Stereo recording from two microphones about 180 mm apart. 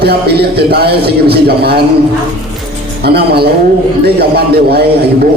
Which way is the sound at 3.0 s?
65° right (ahead or behind).